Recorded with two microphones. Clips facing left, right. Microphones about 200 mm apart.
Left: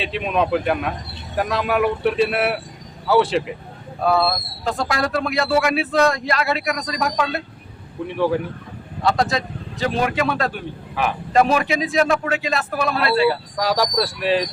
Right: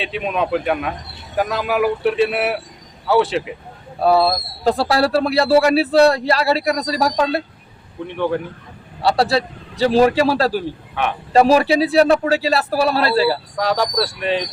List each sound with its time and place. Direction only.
0.0 s speech: centre (ahead or behind)
4.0 s speech: 35° right (ahead or behind)
8.0 s speech: centre (ahead or behind)
9.0 s speech: 35° right (ahead or behind)
13.6 s speech: centre (ahead or behind)